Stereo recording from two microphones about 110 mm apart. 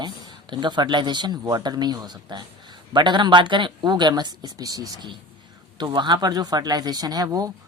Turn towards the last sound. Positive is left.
turn(degrees=-35)  # may be behind; listen again after turning